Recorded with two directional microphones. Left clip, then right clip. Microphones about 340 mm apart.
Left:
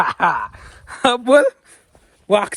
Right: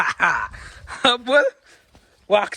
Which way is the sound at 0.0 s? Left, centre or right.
Centre.